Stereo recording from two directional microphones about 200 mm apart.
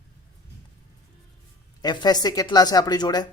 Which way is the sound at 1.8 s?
20° left (ahead or behind).